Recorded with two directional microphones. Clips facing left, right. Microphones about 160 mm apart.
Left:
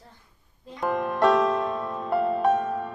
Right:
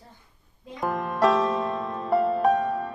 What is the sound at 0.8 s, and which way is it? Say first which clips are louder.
Music: left 1 dB; centre (ahead or behind).